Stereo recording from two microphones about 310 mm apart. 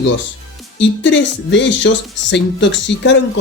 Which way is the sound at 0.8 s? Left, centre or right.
Left.